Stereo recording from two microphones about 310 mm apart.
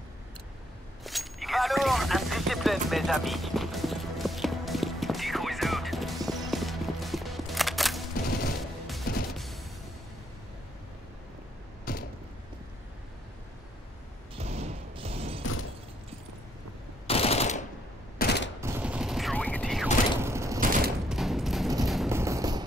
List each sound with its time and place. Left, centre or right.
1.0 s music: centre
11.9 s creak: left
14.4 s mechanisms: right
17.1 s machine gun: centre
18.1 s fusillade: left
18.6 s mechanisms: centre
21.1 s a sound: centre